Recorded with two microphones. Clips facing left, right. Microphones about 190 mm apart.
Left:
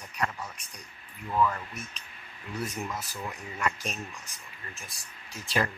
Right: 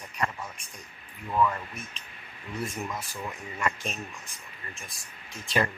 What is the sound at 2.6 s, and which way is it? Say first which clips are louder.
Speech: right 1 dB; centre (ahead or behind).